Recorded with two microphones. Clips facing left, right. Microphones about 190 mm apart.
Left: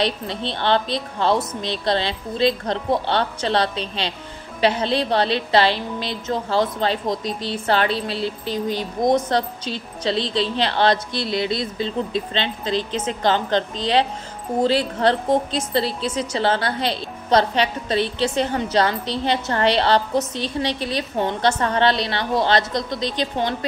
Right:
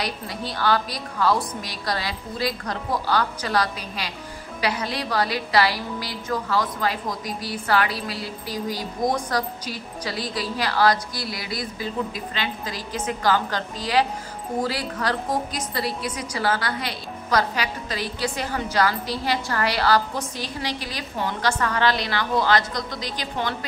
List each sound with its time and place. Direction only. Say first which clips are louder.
0.0 s a woman's voice: left 6 dB; 25° left (ahead or behind)